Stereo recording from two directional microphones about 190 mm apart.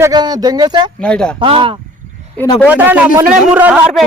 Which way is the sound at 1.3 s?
25° right (ahead or behind).